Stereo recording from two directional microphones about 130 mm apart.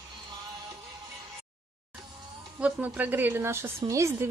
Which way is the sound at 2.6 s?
15° right (ahead or behind).